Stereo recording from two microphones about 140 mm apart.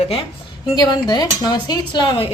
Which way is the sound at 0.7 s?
30° left (ahead or behind).